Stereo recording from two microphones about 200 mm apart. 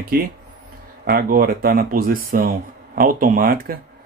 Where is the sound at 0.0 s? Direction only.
45° right (ahead or behind).